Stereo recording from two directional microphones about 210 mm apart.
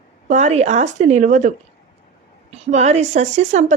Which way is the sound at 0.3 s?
35° right (ahead or behind).